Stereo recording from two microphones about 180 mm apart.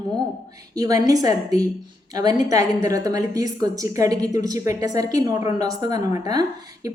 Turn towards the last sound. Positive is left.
turn(degrees=-20)  # may be behind; listen again after turning